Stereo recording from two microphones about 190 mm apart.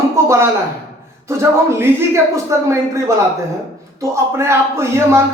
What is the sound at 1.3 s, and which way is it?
Speech, 15° right (ahead or behind).